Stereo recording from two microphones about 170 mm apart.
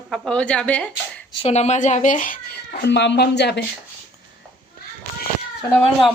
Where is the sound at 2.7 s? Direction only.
90° left.